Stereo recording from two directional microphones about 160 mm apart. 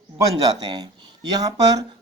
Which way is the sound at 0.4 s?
25° right (ahead or behind).